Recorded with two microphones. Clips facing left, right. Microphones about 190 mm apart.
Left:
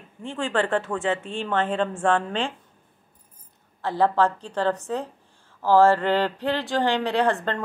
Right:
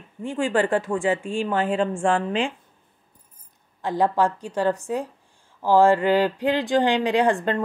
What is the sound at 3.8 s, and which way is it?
Speech, 15° right (ahead or behind).